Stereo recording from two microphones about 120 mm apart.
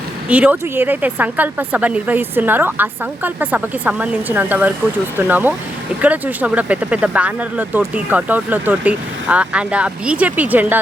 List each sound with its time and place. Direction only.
0.3 s speech: 10° right (ahead or behind)